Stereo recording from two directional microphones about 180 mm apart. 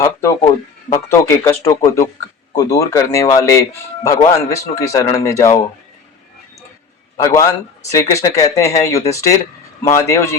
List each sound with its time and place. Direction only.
0.0 s speech: 15° left (ahead or behind)
7.2 s speech: 15° left (ahead or behind)